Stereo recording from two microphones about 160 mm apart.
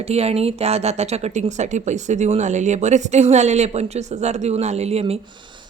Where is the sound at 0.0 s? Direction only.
40° right (ahead or behind).